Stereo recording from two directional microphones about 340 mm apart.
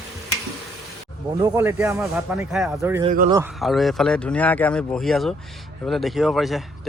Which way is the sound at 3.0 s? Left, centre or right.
Right.